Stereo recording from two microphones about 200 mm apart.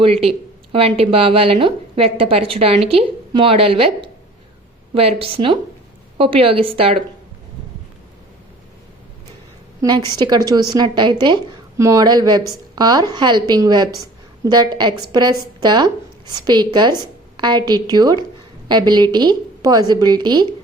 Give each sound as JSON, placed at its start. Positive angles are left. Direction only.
{"t": 0.0, "sound": "speech", "side_deg": -30}
{"t": 9.8, "sound": "speech", "side_deg": -20}